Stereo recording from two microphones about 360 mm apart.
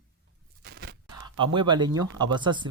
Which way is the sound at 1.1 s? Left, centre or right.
Centre.